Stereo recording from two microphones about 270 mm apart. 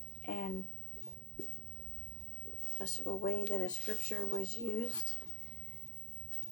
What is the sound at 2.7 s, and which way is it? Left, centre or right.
Speech, left.